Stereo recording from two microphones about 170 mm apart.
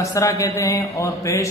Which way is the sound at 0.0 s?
20° left (ahead or behind).